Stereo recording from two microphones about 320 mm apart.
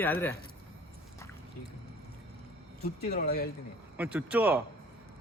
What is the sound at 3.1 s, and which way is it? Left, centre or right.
Speech, left.